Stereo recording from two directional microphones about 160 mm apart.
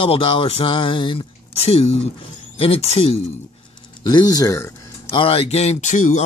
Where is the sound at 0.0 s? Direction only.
35° left (ahead or behind).